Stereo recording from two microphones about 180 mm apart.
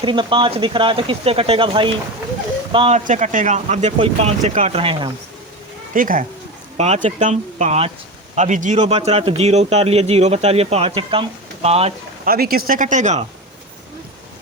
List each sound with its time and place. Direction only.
0.0 s a man's voice: 25° right (ahead or behind)
3.0 s a man's voice: 45° right (ahead or behind); by 5.1 s 30° right (ahead or behind)
5.9 s speech: 50° right (ahead or behind)
6.7 s a man's voice: 40° right (ahead or behind)
12.2 s speech: 55° right (ahead or behind)